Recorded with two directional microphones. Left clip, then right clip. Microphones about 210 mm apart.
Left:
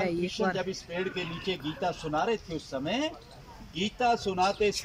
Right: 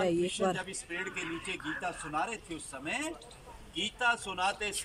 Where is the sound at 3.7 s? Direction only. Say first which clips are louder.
Left 3 dB; 50° left (ahead or behind).